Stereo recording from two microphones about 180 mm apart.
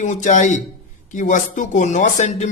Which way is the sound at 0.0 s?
45° left (ahead or behind).